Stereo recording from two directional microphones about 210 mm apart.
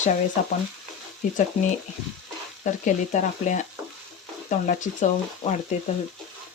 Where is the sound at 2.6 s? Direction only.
35° left (ahead or behind).